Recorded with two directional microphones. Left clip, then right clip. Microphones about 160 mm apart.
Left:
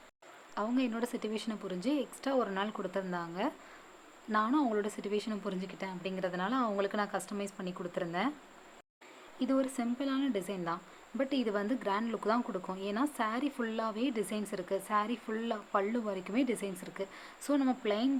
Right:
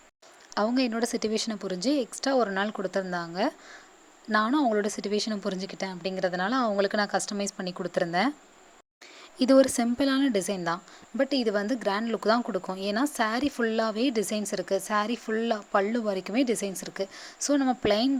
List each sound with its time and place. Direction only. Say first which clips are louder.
0.5 s speech: right 8 dB; 40° right (ahead or behind)
9.4 s speech: right 12 dB; 45° right (ahead or behind)